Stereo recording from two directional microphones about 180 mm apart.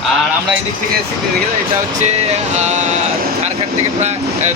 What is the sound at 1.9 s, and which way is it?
Speech, 40° right (ahead or behind).